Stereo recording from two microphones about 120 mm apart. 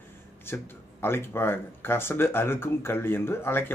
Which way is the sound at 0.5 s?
15° left (ahead or behind).